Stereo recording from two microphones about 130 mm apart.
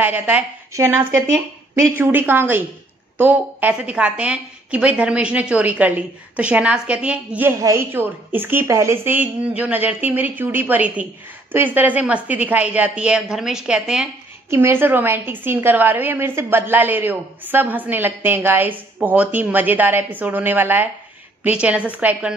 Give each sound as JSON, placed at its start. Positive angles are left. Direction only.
{"t": 0.0, "sound": "a woman's voice", "side_deg": -10}
{"t": 14.5, "sound": "a woman's voice", "side_deg": -20}